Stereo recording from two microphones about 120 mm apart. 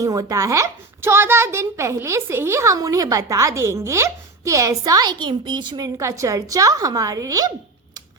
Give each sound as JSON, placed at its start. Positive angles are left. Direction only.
{"t": 0.0, "sound": "a woman's voice", "side_deg": -30}